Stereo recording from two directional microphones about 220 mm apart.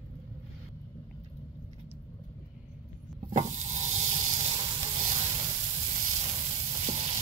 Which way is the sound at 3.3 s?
30° right (ahead or behind).